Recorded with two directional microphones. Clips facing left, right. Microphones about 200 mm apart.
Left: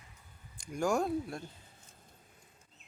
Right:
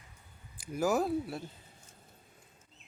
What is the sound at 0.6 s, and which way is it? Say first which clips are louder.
Speech: right 1 dB; 5° right (ahead or behind).